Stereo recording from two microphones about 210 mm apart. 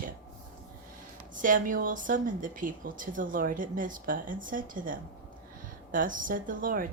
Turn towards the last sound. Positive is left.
turn(degrees=-40)  # may be behind; listen again after turning